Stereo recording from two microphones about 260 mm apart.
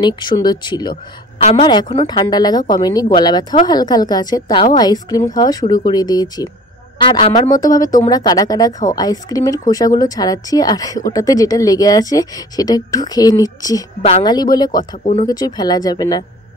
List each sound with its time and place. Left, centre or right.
0.0 s a woman's voice: centre